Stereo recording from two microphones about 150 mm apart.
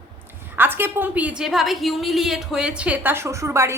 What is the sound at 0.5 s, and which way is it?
A woman's voice, 15° right (ahead or behind).